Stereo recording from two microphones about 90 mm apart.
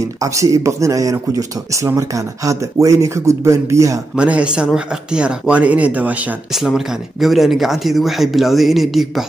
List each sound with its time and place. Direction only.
0.2 s speech: 35° right (ahead or behind)
4.2 s speech: 15° right (ahead or behind)
6.5 s speech: 5° right (ahead or behind)